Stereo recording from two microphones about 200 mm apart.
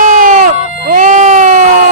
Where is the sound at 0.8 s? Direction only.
45° right (ahead or behind).